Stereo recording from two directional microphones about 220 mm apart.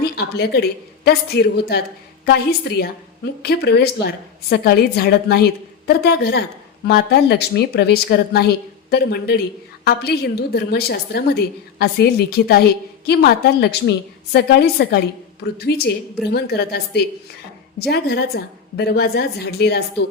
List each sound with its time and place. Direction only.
0.0 s a woman's voice: 45° left (ahead or behind)